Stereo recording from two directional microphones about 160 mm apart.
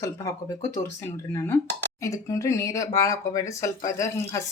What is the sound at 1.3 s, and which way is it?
Speech, 15° left (ahead or behind).